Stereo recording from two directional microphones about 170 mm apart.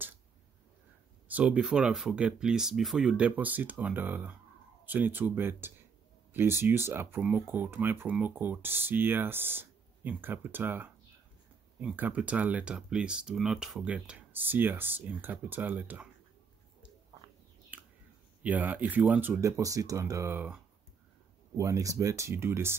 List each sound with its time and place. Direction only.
1.3 s speech: 5° right (ahead or behind)
17.7 s a sound: 10° right (ahead or behind)
18.4 s speech: 10° right (ahead or behind)